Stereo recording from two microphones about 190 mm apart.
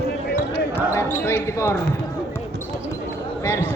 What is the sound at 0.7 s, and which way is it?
Basketball bounce, 10° left (ahead or behind).